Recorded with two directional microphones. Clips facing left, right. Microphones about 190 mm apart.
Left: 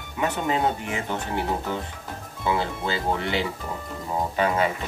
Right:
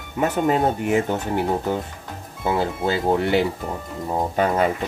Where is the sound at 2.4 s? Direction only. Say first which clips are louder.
Right 4 dB; 45° right (ahead or behind).